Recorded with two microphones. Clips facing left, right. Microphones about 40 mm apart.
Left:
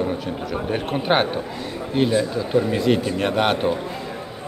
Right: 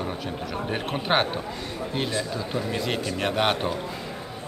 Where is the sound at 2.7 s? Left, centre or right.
Centre.